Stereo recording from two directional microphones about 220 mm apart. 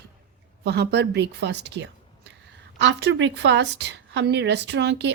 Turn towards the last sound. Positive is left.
turn(degrees=-50)  # may be behind; listen again after turning